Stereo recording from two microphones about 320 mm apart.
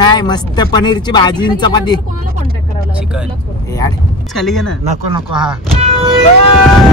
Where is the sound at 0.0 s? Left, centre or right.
Centre.